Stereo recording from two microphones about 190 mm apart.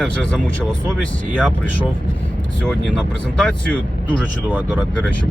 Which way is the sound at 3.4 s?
5° left (ahead or behind).